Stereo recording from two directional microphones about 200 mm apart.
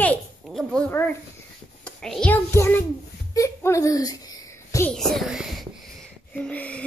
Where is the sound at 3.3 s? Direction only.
15° left (ahead or behind).